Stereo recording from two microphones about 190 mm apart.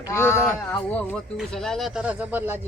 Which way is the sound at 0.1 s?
15° left (ahead or behind).